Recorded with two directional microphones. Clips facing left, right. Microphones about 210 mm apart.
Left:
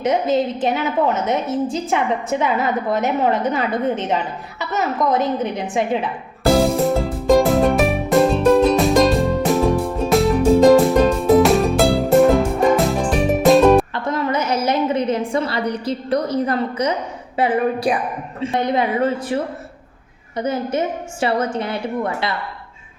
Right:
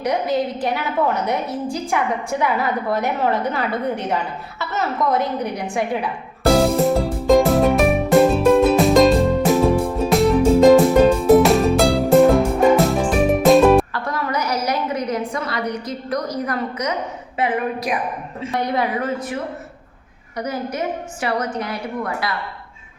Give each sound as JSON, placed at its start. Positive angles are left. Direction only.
{"t": 0.0, "sound": "a woman's voice", "side_deg": 20}
{"t": 6.4, "sound": "music", "side_deg": 0}
{"t": 13.9, "sound": "a sound", "side_deg": 20}
{"t": 17.3, "sound": "a woman's voice", "side_deg": 30}